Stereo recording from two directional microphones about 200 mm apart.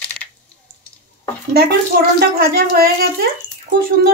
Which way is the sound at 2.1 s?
50° right (ahead or behind).